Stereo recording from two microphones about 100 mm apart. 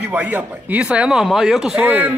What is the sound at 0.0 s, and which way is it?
Speech, 15° right (ahead or behind).